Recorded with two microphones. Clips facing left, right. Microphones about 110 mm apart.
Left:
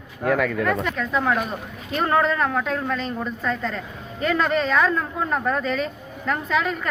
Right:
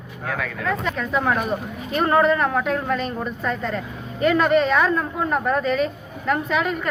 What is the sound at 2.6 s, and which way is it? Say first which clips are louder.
Speech: right 2 dB; 10° right (ahead or behind).